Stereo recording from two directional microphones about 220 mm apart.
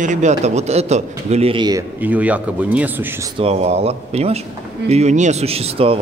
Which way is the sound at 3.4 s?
30° right (ahead or behind).